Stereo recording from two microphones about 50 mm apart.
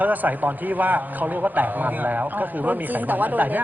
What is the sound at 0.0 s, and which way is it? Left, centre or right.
A man's voice, right.